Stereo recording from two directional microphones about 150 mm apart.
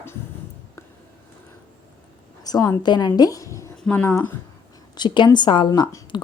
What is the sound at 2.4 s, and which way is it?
Speech, 25° left (ahead or behind).